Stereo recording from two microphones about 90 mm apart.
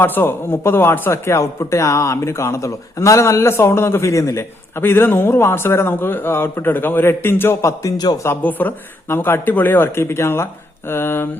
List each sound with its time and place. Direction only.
0.0 s speech: 25° left (ahead or behind)
7.9 s a man's voice: 45° left (ahead or behind)
8.2 s speech: 25° left (ahead or behind)